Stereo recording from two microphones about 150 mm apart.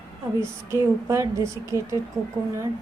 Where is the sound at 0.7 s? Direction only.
20° right (ahead or behind).